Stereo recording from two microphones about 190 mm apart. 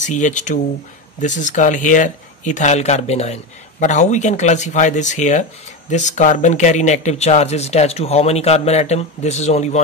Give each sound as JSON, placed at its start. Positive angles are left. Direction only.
{"t": 0.0, "sound": "speech", "side_deg": 40}